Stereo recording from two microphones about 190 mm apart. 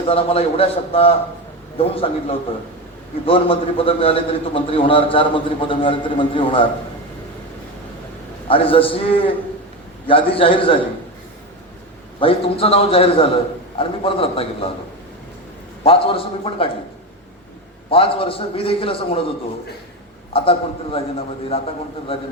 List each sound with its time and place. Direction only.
0.1 s a man's voice: 30° left (ahead or behind)
8.4 s a man's voice: 30° left (ahead or behind)
12.2 s a man's voice: 30° left (ahead or behind)
15.8 s a man's voice: 30° left (ahead or behind)
17.9 s a man's voice: 30° left (ahead or behind)
20.3 s a man's voice: 30° left (ahead or behind)